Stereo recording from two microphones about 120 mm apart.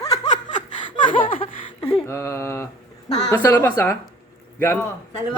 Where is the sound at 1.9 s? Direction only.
25° left (ahead or behind).